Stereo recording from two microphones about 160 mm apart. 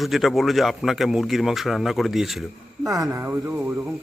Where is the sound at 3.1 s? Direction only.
15° right (ahead or behind).